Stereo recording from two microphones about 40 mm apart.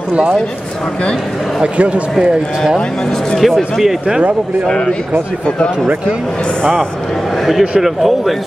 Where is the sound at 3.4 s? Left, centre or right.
Centre.